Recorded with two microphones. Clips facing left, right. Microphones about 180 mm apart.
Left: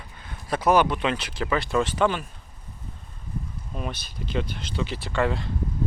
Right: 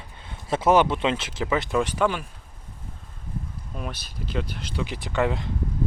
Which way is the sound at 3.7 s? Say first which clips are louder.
Left 2 dB; 5° right (ahead or behind).